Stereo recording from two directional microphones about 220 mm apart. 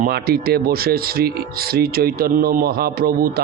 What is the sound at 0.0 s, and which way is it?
Speech, 45° right (ahead or behind).